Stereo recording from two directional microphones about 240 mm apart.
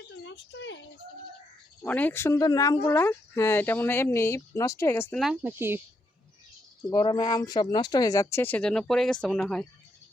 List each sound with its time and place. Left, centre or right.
0.3 s speech: left
1.8 s speech: centre
5.2 s speech: centre
6.9 s speech: centre